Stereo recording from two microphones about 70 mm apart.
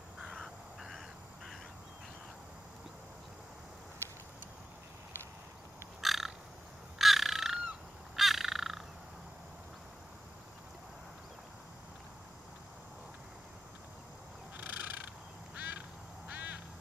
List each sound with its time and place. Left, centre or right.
0.2 s crow: centre
5.9 s frog: centre
7.0 s crow: centre
14.6 s crow: right
15.5 s quack: right
16.3 s crow: right